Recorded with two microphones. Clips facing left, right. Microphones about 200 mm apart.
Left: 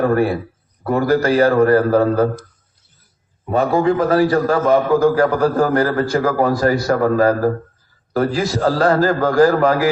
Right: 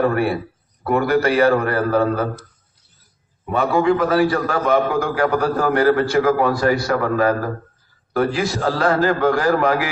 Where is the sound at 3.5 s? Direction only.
35° left (ahead or behind).